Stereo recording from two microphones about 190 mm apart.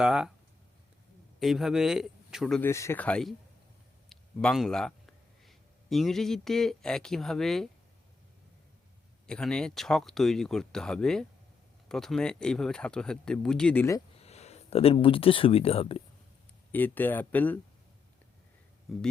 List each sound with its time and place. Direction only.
0.0 s speech: 5° right (ahead or behind)
1.4 s speech: centre (ahead or behind)
2.6 s speech: 15° left (ahead or behind)
9.2 s speech: 5° left (ahead or behind)
14.2 s speech: 35° left (ahead or behind)
16.7 s speech: 10° left (ahead or behind)